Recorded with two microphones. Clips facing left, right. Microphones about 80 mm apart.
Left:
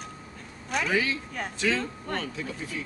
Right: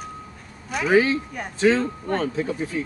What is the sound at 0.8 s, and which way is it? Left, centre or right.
Speech, right.